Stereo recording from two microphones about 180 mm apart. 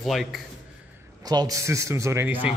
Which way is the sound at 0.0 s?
Centre (ahead or behind).